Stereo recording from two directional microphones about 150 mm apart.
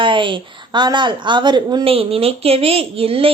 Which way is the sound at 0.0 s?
35° right (ahead or behind).